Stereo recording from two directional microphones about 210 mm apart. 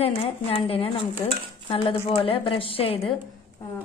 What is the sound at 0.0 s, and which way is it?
Speech, 25° left (ahead or behind).